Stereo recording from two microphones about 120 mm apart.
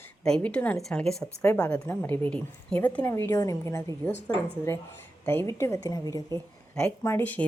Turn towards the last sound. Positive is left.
turn(degrees=15)  # may be behind; listen again after turning